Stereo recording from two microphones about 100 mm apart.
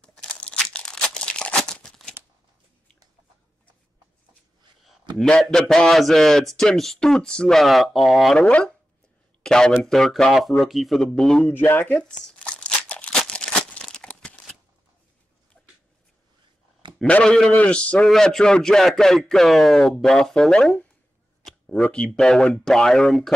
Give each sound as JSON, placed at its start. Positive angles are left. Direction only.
{"t": 0.0, "sound": "crumpling", "side_deg": 10}
{"t": 5.1, "sound": "a man's voice", "side_deg": 5}
{"t": 8.5, "sound": "a man's voice", "side_deg": 10}
{"t": 11.4, "sound": "speech", "side_deg": 20}
{"t": 12.1, "sound": "crumpling", "side_deg": 10}
{"t": 13.2, "sound": "a sound", "side_deg": 10}
{"t": 17.0, "sound": "a man's voice", "side_deg": 10}